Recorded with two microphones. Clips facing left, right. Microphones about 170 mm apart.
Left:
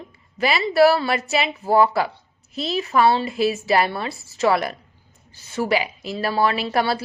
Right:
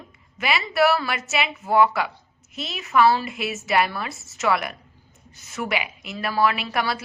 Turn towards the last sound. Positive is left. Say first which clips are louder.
# left 5 dB
turn(degrees=30)  # may be behind; listen again after turning